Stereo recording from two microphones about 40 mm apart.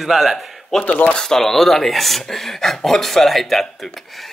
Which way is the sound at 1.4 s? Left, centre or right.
Centre.